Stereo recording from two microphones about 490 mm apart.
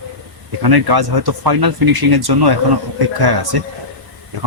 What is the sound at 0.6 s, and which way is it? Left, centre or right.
Speech, right.